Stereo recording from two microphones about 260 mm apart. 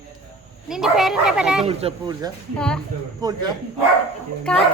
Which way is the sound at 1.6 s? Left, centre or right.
Centre.